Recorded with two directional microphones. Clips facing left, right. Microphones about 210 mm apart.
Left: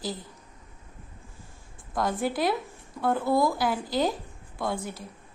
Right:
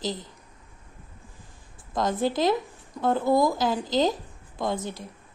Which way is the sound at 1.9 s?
20° right (ahead or behind).